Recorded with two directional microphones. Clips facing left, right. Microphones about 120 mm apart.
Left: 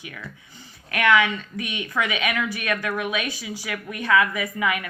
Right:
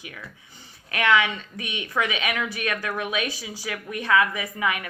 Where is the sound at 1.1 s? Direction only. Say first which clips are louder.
Left 2 dB; 20° right (ahead or behind).